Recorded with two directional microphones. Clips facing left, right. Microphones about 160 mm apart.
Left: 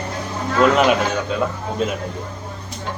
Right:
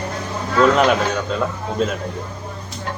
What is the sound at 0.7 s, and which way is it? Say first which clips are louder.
Speech: even; 5° left (ahead or behind).